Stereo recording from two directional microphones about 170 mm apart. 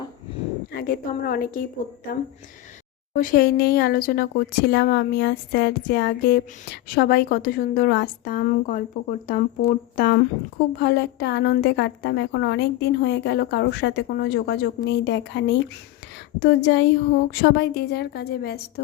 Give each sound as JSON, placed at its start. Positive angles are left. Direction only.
{"t": 0.7, "sound": "a woman's voice", "side_deg": 60}
{"t": 3.1, "sound": "speech", "side_deg": 55}
{"t": 10.8, "sound": "a woman's voice", "side_deg": 90}